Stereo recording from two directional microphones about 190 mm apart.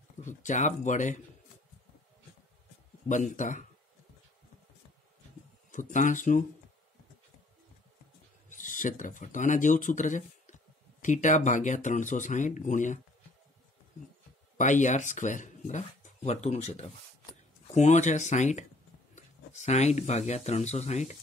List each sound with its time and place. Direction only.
0.2 s speech: 40° left (ahead or behind)
3.1 s speech: 40° left (ahead or behind)
5.7 s speech: 40° left (ahead or behind)
8.5 s speech: 40° left (ahead or behind)
14.6 s speech: 40° left (ahead or behind)